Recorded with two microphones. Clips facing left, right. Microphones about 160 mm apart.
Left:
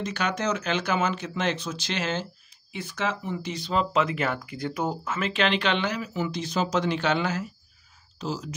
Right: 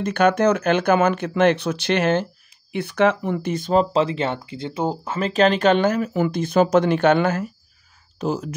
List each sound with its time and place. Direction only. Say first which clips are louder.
0.0 s speech: right 11 dB; 55° right (ahead or behind)
3.9 s speech: right 5 dB; 30° right (ahead or behind); by 8.5 s 55° right (ahead or behind)